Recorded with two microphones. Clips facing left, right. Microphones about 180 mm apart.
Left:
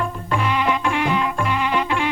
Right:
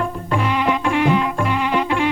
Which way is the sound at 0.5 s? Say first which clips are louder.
Right 3 dB; 45° right (ahead or behind).